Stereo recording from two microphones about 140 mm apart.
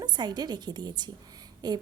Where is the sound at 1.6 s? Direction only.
30° right (ahead or behind).